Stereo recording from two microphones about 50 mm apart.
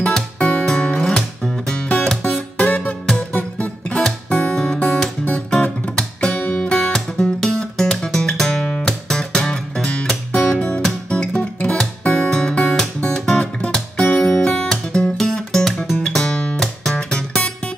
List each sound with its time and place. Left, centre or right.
0.0 s music: left
2.2 s music: left
11.1 s guitar: left
11.8 s music: centre
13.4 s guitar: left; by 16.0 s centre
16.0 s music: centre